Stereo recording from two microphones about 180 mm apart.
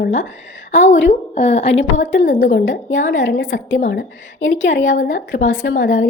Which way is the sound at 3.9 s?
75° left (ahead or behind).